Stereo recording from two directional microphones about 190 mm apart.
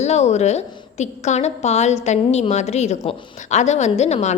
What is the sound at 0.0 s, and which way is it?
A woman's voice, 35° left (ahead or behind).